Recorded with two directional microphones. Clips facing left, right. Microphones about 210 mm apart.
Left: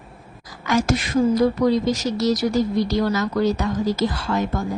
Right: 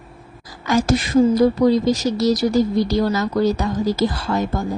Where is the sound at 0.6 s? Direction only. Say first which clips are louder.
Right 3 dB; 30° right (ahead or behind).